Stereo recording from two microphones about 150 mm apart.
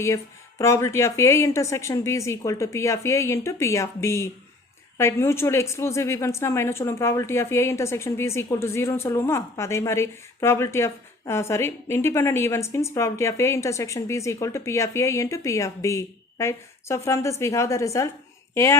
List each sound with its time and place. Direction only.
0.6 s speech: 20° left (ahead or behind)